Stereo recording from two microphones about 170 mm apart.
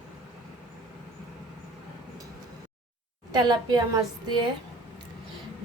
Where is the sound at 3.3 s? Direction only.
25° right (ahead or behind).